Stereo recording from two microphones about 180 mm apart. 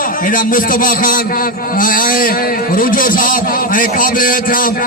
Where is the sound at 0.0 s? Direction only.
50° left (ahead or behind).